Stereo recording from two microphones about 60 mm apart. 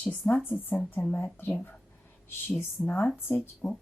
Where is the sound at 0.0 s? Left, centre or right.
Left.